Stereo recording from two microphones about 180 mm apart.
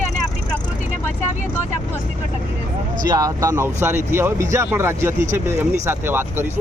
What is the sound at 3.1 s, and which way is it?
Speech, 20° right (ahead or behind).